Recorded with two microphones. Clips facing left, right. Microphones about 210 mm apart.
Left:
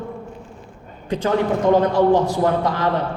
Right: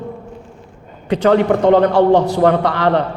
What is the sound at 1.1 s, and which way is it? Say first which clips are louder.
A man's voice: right 6 dB; 70° right (ahead or behind).